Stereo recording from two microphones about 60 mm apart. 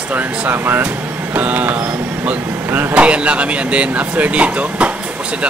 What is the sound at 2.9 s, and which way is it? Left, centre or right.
Speech, centre.